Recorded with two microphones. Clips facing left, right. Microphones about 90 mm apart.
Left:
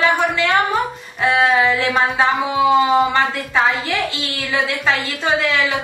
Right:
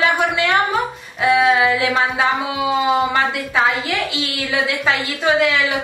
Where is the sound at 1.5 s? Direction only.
5° right (ahead or behind).